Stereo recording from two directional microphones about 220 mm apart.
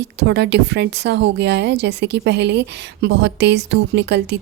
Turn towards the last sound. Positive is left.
turn(degrees=-50)  # may be behind; listen again after turning